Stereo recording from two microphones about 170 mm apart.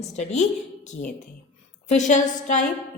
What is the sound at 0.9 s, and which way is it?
A woman's voice, 55° left (ahead or behind).